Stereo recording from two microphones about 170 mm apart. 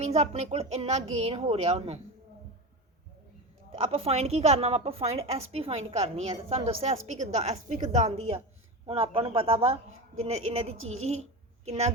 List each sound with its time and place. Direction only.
0.0 s a woman's voice: 40° right (ahead or behind)
3.8 s a woman's voice: 35° right (ahead or behind)